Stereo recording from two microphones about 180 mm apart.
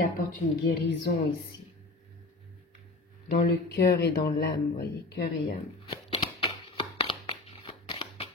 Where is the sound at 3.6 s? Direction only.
65° left (ahead or behind).